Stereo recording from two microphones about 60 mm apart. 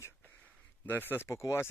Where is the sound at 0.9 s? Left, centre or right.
Left.